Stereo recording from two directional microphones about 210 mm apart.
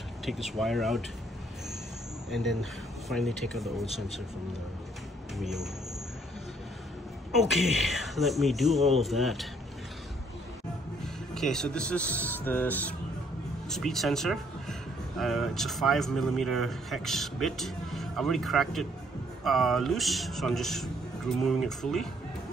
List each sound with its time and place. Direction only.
0.2 s speech: centre (ahead or behind)
2.3 s speech: centre (ahead or behind)
5.4 s speech: centre (ahead or behind)
7.3 s speech: centre (ahead or behind)
11.3 s speech: centre (ahead or behind)